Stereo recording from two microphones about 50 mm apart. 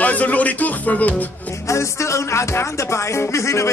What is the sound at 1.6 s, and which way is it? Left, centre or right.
Music, left.